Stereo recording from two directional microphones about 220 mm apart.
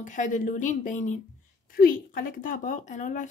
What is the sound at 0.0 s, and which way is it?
A woman's voice, 35° left (ahead or behind).